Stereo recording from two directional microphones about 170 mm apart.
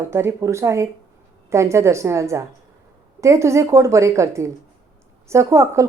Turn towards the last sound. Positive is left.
turn(degrees=-15)  # may be behind; listen again after turning